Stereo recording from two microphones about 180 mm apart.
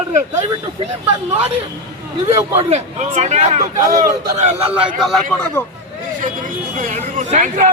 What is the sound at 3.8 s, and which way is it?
Speech, 20° right (ahead or behind).